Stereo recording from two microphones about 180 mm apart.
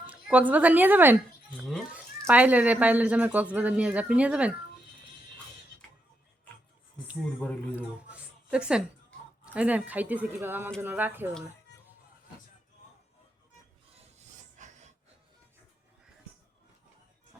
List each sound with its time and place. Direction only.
0.1 s a woman's voice: 10° right (ahead or behind)
7.8 s speech: 5° right (ahead or behind)
13.9 s filing: 40° right (ahead or behind)